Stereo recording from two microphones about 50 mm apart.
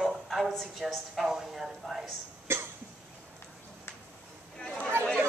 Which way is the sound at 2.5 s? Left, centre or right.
Right.